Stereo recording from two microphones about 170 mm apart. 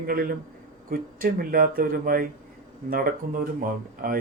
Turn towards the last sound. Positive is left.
turn(degrees=-60)  # may be behind; listen again after turning